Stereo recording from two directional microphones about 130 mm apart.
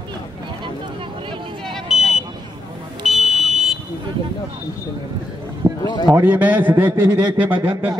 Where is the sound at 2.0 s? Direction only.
Centre (ahead or behind).